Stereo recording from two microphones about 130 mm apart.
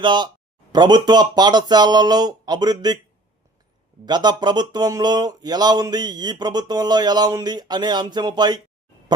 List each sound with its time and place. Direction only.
0.0 s speech: 35° right (ahead or behind)
4.0 s speech: 35° right (ahead or behind)